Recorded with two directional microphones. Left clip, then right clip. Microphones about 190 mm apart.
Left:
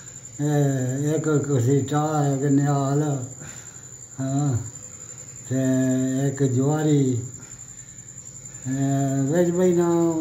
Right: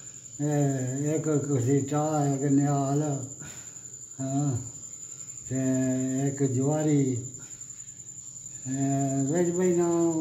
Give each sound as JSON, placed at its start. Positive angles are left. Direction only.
{"t": 0.4, "sound": "speech", "side_deg": 0}
{"t": 4.2, "sound": "speech", "side_deg": 0}
{"t": 5.5, "sound": "speech", "side_deg": 5}
{"t": 8.6, "sound": "speech", "side_deg": 5}